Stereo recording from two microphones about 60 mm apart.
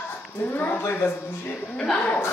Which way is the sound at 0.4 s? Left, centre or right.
Left.